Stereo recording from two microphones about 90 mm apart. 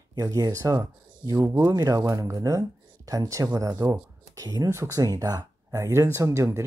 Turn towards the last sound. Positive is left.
turn(degrees=-35)  # may be behind; listen again after turning